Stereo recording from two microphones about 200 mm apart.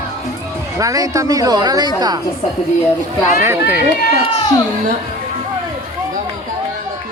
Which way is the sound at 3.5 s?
10° right (ahead or behind).